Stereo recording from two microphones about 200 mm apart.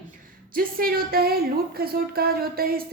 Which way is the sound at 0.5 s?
45° right (ahead or behind).